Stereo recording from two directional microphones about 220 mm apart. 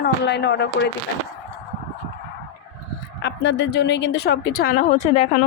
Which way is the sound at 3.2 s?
50° left (ahead or behind).